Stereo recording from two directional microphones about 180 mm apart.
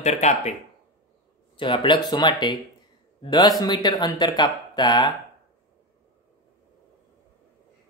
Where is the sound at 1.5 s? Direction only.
30° left (ahead or behind).